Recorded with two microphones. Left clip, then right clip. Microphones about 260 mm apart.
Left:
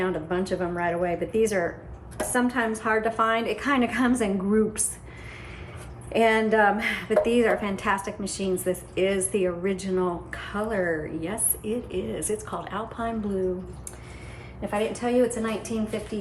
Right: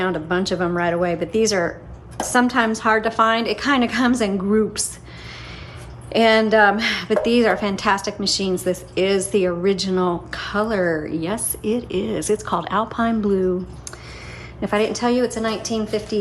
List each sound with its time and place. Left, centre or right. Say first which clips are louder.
0.0 s a woman's voice: right 6 dB; centre
6.1 s a woman's voice: right 6 dB; centre
14.6 s a woman's voice: right 7 dB; right